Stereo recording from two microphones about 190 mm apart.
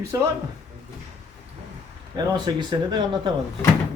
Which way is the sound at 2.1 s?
25° right (ahead or behind).